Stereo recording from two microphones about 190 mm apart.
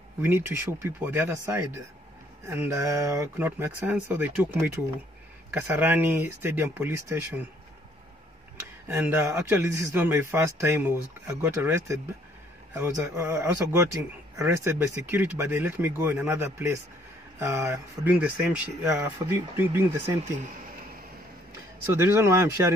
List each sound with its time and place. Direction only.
0.2 s speech: 10° right (ahead or behind)
2.7 s speech: 15° right (ahead or behind)
8.8 s speech: 10° right (ahead or behind)
20.2 s speech: 45° right (ahead or behind)
21.8 s speech: 15° right (ahead or behind)